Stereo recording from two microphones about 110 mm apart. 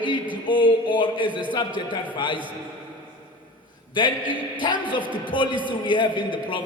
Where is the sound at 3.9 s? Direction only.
45° left (ahead or behind).